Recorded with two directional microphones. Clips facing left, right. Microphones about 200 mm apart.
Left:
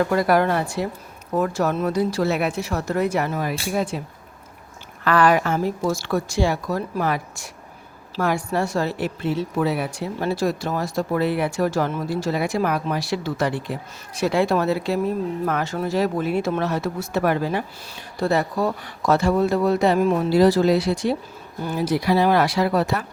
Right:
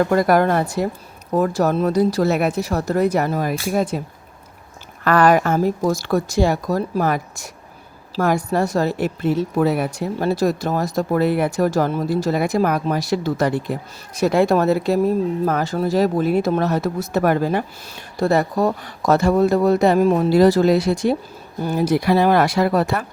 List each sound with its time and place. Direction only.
0.0 s a woman's voice: 45° right (ahead or behind)
5.0 s a woman's voice: 45° right (ahead or behind)